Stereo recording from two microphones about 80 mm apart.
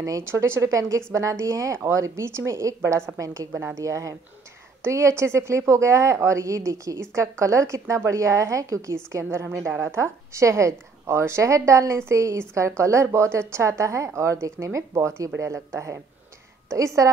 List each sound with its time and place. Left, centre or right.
0.2 s a woman's voice: right